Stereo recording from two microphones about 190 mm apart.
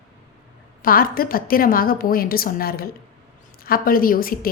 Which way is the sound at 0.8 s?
50° left (ahead or behind).